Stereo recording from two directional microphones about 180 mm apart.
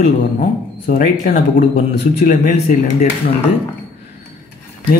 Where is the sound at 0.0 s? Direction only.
55° left (ahead or behind).